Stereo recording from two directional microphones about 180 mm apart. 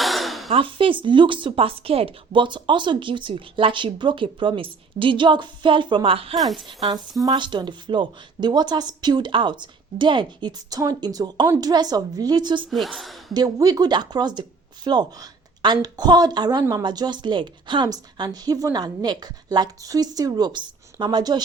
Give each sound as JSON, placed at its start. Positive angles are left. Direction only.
{"t": 0.0, "sound": "a sound", "side_deg": 0}
{"t": 0.5, "sound": "speech", "side_deg": -30}
{"t": 6.3, "sound": "a woman's voice", "side_deg": 0}
{"t": 6.7, "sound": "speech", "side_deg": -25}
{"t": 12.7, "sound": "a woman's voice", "side_deg": 0}
{"t": 13.3, "sound": "speech", "side_deg": -20}